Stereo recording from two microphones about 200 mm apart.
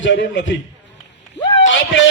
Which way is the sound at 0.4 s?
70° left (ahead or behind).